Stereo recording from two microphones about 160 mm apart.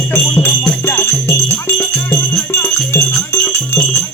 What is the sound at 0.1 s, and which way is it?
Music, 15° left (ahead or behind).